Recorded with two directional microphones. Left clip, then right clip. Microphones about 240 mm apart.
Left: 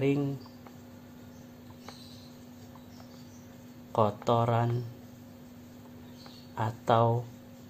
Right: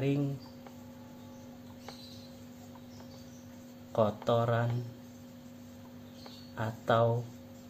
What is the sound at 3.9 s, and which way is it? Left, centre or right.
Mantra, left.